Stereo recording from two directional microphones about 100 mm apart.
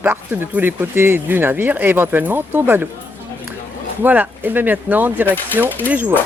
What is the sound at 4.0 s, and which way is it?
Speech, 20° right (ahead or behind).